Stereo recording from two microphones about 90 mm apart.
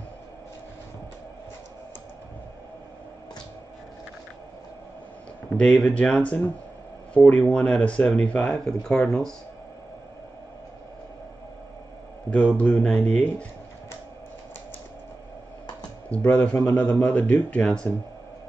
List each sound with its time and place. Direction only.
5.6 s speech: 10° left (ahead or behind)
12.3 s speech: 15° left (ahead or behind)
16.1 s speech: 15° left (ahead or behind)